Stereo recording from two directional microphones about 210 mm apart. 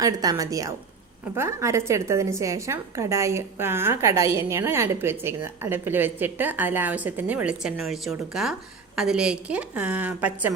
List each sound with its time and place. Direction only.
0.0 s speech: 15° right (ahead or behind)